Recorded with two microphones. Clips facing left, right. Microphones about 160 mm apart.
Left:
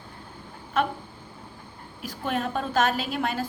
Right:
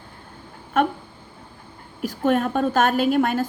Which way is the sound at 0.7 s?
50° right (ahead or behind).